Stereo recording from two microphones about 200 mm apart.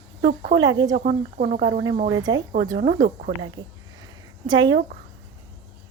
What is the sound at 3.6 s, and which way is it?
A woman's voice, 20° right (ahead or behind).